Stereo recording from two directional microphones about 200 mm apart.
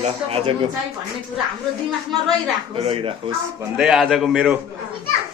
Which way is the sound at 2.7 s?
25° right (ahead or behind).